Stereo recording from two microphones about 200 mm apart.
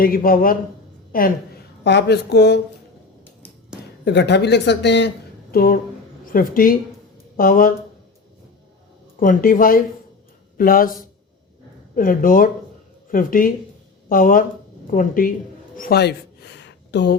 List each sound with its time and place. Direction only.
0.0 s speech: 45° left (ahead or behind)
1.8 s speech: 55° left (ahead or behind)
4.0 s speech: 60° left (ahead or behind)
9.2 s speech: 45° left (ahead or behind)
11.9 s speech: 45° left (ahead or behind)
15.7 s a sound: 50° left (ahead or behind)